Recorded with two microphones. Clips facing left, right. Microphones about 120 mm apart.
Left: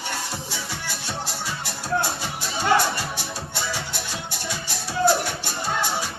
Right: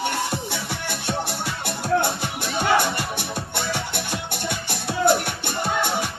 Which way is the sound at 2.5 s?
60° right (ahead or behind).